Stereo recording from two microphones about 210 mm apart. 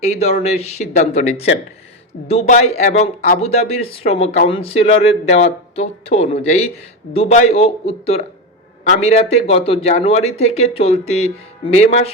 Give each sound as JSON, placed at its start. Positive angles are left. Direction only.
{"t": 0.0, "sound": "speech", "side_deg": 30}